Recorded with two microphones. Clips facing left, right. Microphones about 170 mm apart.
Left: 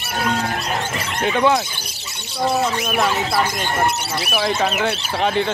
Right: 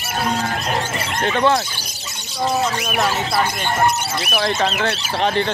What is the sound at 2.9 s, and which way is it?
Speech, centre (ahead or behind).